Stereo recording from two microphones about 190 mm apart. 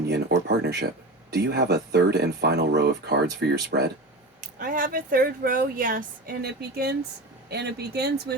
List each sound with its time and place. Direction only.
0.1 s speech: 60° right (ahead or behind)
4.4 s speech: 45° right (ahead or behind)